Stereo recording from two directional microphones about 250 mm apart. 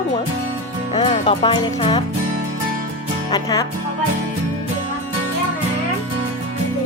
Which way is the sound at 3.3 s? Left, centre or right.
Centre.